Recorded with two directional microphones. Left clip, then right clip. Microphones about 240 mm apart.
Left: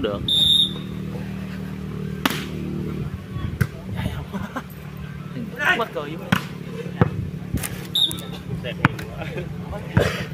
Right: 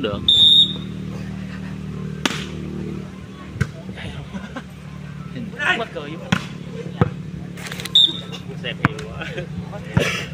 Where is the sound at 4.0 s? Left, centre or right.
Left.